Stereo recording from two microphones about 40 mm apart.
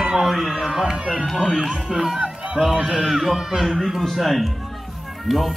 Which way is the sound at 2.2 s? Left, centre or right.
Right.